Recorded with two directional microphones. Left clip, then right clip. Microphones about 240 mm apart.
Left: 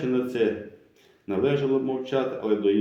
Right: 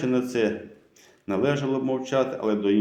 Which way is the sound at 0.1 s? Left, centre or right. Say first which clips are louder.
Left 1 dB; right.